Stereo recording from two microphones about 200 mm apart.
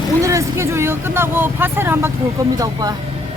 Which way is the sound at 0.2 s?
15° right (ahead or behind).